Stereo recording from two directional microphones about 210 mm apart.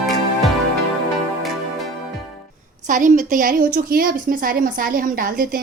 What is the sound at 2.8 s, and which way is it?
A woman's voice, 40° right (ahead or behind).